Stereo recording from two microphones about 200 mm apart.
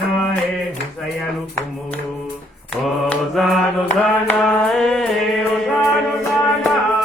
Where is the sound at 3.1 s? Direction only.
Centre (ahead or behind).